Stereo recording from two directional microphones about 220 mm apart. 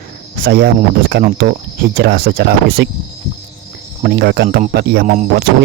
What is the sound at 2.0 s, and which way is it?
Speech, 40° right (ahead or behind).